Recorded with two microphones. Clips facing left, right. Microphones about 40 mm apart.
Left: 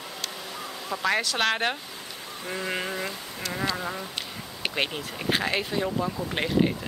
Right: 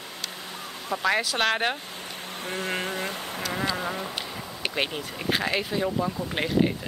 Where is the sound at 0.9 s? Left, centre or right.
Centre.